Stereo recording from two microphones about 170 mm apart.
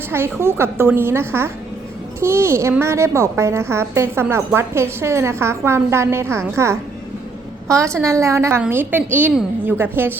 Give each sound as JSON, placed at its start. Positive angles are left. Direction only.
{"t": 0.1, "sound": "a woman's voice", "side_deg": -15}